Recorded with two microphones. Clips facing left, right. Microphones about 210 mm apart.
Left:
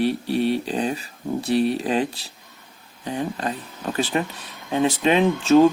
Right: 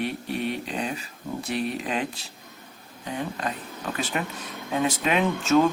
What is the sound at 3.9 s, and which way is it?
Speech, 35° left (ahead or behind).